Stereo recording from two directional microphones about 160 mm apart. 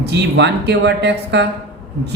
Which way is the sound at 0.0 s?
90° right.